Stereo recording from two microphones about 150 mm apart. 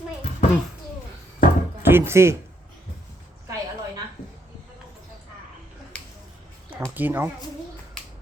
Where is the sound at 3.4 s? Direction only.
20° right (ahead or behind).